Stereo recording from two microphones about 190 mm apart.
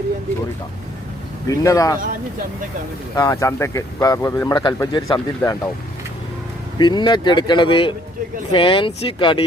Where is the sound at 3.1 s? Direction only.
20° left (ahead or behind).